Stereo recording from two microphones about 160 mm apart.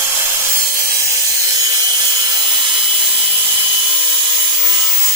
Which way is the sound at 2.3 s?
30° right (ahead or behind).